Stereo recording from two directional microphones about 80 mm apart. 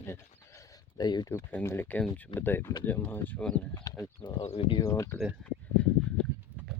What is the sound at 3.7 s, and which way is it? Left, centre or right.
Speech, left.